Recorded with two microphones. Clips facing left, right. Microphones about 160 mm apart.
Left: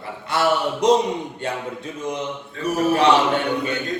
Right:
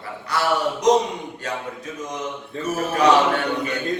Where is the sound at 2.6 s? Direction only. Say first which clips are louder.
Left 2 dB; 10° left (ahead or behind).